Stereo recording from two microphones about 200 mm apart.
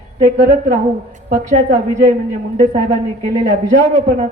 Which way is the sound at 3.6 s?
40° right (ahead or behind).